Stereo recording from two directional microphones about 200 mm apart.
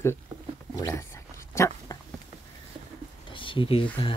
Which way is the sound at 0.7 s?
15° left (ahead or behind).